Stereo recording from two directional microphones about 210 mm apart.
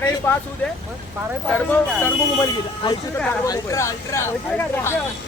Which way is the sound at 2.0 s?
20° left (ahead or behind).